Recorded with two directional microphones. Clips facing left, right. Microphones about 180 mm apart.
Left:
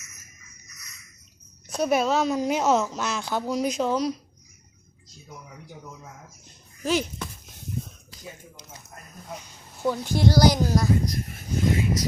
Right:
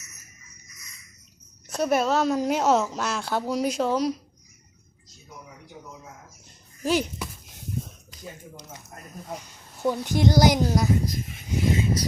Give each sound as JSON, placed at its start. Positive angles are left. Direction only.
{"t": 1.7, "sound": "speech", "side_deg": 0}
{"t": 6.8, "sound": "a woman's voice", "side_deg": -10}
{"t": 9.8, "sound": "a woman's voice", "side_deg": -15}
{"t": 11.0, "sound": "speech", "side_deg": 0}
{"t": 11.7, "sound": "a sound", "side_deg": -25}